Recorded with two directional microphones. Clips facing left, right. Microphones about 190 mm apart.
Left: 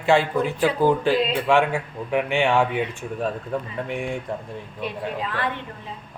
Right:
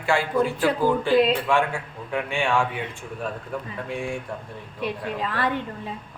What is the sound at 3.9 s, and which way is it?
Speech, 20° left (ahead or behind).